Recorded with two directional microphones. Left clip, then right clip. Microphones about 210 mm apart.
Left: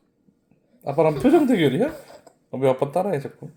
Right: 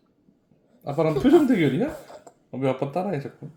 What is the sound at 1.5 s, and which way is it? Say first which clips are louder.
Speech: left 3 dB; 35° left (ahead or behind).